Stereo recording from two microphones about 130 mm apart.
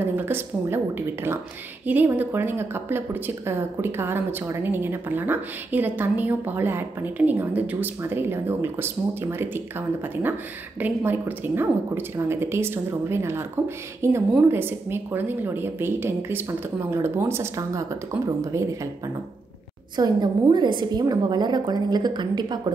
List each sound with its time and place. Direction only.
0.1 s a woman's voice: 15° right (ahead or behind)
20.0 s a woman's voice: 35° right (ahead or behind)